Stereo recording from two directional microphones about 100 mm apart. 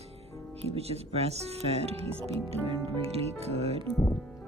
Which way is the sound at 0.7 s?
80° right.